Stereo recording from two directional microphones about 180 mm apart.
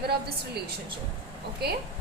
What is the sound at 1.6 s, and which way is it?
Speech, 60° right (ahead or behind).